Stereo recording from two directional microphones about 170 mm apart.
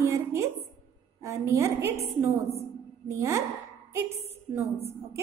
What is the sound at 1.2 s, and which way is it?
A woman's voice, 15° right (ahead or behind).